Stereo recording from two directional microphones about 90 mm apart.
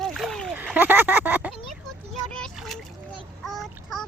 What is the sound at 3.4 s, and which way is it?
Child singing, centre (ahead or behind).